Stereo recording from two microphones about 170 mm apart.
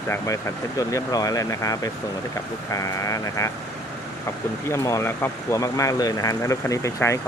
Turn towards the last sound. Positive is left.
turn(degrees=20)  # may be behind; listen again after turning